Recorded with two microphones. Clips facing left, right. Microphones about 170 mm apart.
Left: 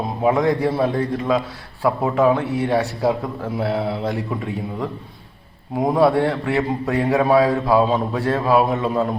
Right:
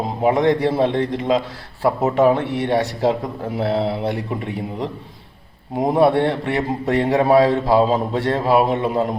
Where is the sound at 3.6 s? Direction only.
30° right (ahead or behind).